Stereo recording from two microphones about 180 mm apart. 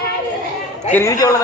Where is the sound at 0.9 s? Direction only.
15° left (ahead or behind).